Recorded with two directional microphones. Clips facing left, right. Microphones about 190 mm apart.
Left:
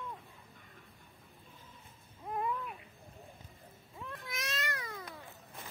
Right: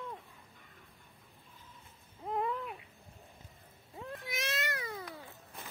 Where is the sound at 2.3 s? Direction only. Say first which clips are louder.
Right 2 dB; 25° right (ahead or behind).